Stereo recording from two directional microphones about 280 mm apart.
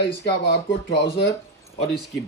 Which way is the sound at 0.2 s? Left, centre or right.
Left.